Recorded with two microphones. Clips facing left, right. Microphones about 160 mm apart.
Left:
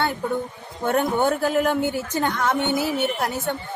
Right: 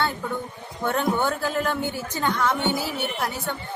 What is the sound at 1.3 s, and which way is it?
Speech, 50° left (ahead or behind).